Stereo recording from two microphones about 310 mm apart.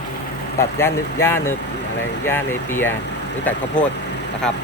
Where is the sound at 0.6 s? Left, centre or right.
Centre.